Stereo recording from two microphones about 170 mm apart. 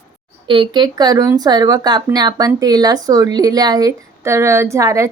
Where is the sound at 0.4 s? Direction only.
30° right (ahead or behind).